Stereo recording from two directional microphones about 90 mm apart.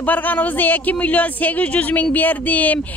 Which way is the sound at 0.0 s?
20° left (ahead or behind).